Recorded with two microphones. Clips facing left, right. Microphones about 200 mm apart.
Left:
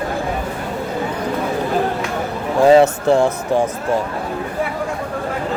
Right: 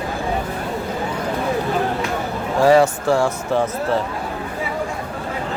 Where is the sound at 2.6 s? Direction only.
20° left (ahead or behind).